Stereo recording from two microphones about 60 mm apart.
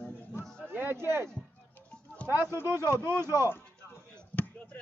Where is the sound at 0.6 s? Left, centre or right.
Right.